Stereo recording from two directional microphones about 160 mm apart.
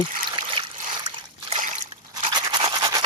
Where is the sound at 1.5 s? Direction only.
45° right (ahead or behind).